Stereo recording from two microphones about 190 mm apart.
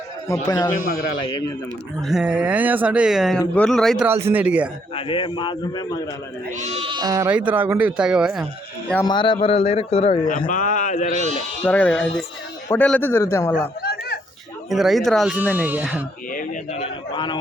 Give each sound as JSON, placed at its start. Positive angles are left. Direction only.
{"t": 0.4, "sound": "a man's voice", "side_deg": 20}
{"t": 2.0, "sound": "speech", "side_deg": 0}
{"t": 4.0, "sound": "speech", "side_deg": -10}
{"t": 4.9, "sound": "a man's voice", "side_deg": 30}
{"t": 6.6, "sound": "speech", "side_deg": -35}
{"t": 7.3, "sound": "speech", "side_deg": -10}
{"t": 9.0, "sound": "a man's voice", "side_deg": 25}
{"t": 10.2, "sound": "a man's voice", "side_deg": 45}
{"t": 11.1, "sound": "speech", "side_deg": -35}
{"t": 11.6, "sound": "a man's voice", "side_deg": 10}
{"t": 13.8, "sound": "a sound", "side_deg": 55}
{"t": 14.7, "sound": "speech", "side_deg": 0}
{"t": 16.7, "sound": "a man's voice", "side_deg": 30}